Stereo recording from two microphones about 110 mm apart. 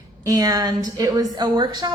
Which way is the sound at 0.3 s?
35° right (ahead or behind).